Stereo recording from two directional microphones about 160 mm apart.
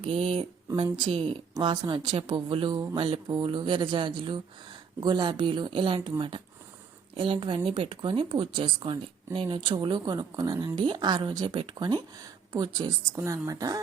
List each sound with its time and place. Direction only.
0.0 s speech: 35° right (ahead or behind)